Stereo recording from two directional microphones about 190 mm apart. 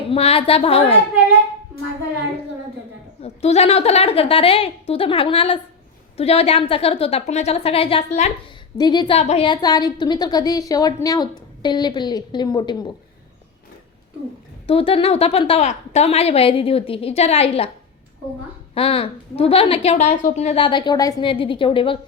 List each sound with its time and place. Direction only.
0.0 s a woman's voice: 30° left (ahead or behind)
3.2 s a woman's voice: 35° left (ahead or behind)
9.1 s a woman's voice: 35° left (ahead or behind)
14.7 s a woman's voice: 30° left (ahead or behind)
18.7 s a woman's voice: 30° left (ahead or behind)